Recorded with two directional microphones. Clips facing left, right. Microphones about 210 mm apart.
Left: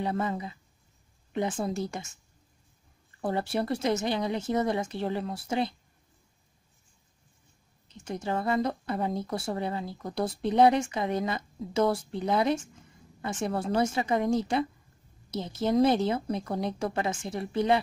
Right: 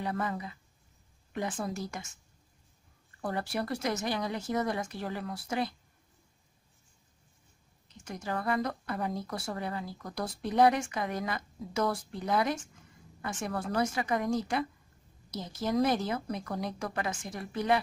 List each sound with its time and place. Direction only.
0.0 s a woman's voice: 25° left (ahead or behind)
3.2 s a woman's voice: 25° left (ahead or behind)
8.0 s a woman's voice: 25° left (ahead or behind)